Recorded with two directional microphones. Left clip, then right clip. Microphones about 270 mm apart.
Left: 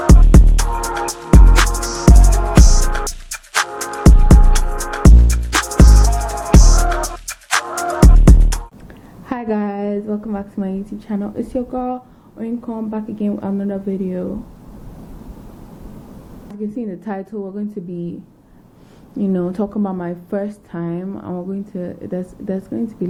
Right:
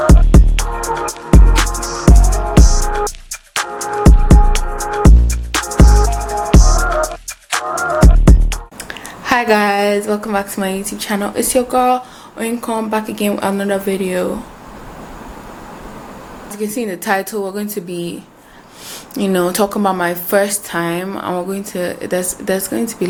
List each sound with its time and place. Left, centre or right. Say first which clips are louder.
0.1 s music: right 1 dB; centre
10.1 s a woman's voice: right 8 dB; centre
16.6 s a woman's voice: right 6 dB; centre
17.3 s a woman's voice: right 7 dB; right
17.6 s a woman's voice: right 5 dB; centre